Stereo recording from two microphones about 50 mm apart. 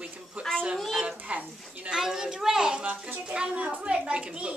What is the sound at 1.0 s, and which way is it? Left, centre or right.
Speech, right.